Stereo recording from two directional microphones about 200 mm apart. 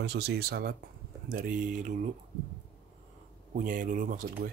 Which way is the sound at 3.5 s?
40° right (ahead or behind).